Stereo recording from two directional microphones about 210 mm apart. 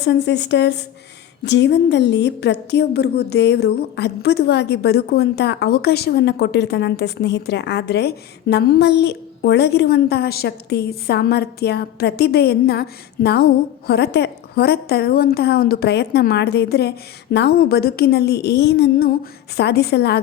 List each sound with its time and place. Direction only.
0.0 s a woman's voice: 55° left (ahead or behind)